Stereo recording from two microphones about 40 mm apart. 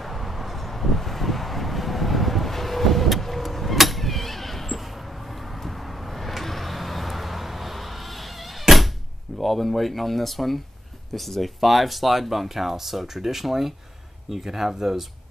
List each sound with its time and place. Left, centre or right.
0.0 s vehicle: centre
9.4 s speech: centre